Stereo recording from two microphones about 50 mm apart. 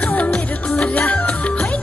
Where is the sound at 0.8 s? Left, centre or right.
Left.